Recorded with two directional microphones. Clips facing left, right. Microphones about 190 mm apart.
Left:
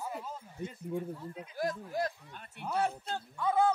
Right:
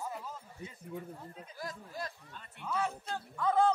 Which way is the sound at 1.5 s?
65° left (ahead or behind).